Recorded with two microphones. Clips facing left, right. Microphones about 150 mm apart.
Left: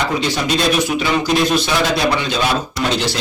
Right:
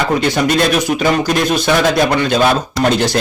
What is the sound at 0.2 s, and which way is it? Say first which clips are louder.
Speech: right 4 dB; 55° right (ahead or behind).